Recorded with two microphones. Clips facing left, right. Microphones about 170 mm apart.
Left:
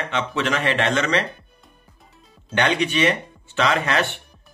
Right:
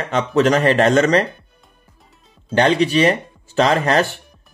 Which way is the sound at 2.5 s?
35° right (ahead or behind).